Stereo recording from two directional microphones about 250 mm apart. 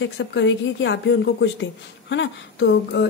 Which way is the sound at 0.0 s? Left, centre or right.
Left.